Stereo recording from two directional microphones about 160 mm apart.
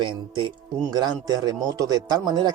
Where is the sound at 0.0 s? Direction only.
30° right (ahead or behind).